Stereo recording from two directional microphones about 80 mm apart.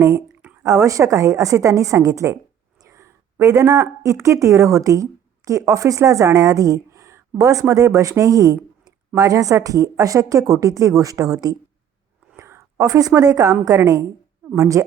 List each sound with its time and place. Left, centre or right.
0.6 s a woman's voice: right